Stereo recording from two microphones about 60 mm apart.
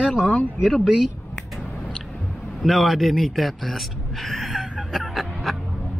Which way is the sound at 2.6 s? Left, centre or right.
Centre.